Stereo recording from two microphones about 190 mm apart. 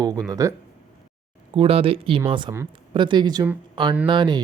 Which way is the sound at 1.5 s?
30° right (ahead or behind).